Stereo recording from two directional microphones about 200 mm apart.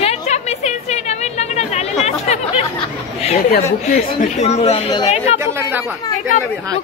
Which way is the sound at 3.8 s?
35° left (ahead or behind).